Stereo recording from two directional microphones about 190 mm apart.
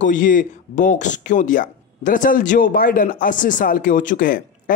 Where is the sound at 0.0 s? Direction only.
45° left (ahead or behind).